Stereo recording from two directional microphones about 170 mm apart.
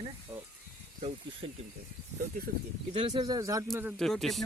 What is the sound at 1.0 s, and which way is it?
Speech, 35° right (ahead or behind).